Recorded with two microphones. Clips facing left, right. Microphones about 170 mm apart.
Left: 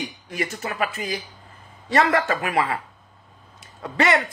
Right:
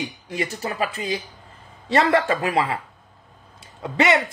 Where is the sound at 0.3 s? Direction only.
30° right (ahead or behind).